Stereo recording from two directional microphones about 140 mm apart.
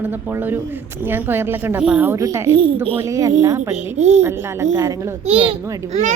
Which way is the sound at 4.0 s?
55° right (ahead or behind).